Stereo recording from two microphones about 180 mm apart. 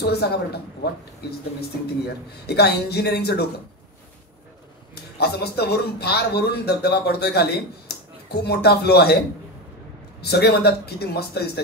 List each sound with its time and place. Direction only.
0.0 s a man's voice: 65° left (ahead or behind)
2.4 s a man's voice: 65° left (ahead or behind)
5.1 s a man's voice: 65° left (ahead or behind)
10.2 s a man's voice: 65° left (ahead or behind)